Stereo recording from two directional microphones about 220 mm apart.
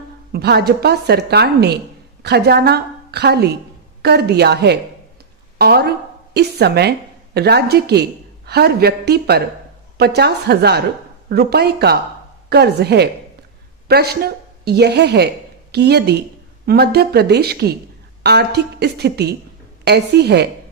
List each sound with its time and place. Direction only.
0.3 s a woman's voice: 45° right (ahead or behind)